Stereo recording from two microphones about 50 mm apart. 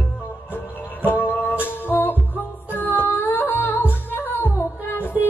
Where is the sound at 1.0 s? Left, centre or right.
Left.